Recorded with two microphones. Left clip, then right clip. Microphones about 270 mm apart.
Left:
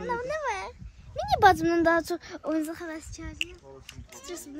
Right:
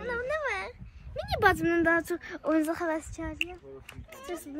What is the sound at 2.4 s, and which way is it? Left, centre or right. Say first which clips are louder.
Speech: right 3 dB; centre.